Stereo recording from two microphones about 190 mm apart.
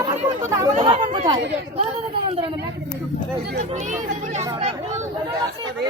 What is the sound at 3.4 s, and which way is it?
Speech, 45° right (ahead or behind).